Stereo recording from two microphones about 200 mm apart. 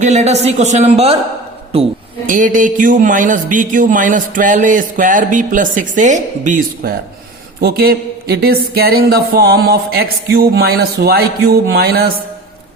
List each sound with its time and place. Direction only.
0.0 s speech: 35° right (ahead or behind)
2.2 s speech: 40° right (ahead or behind)